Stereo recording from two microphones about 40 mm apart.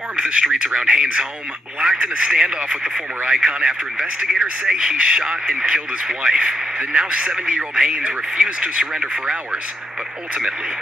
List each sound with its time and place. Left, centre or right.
0.1 s speech: right